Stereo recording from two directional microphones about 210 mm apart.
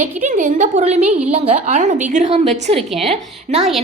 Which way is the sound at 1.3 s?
35° right (ahead or behind).